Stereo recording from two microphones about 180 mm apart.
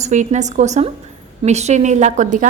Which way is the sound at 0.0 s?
40° right (ahead or behind).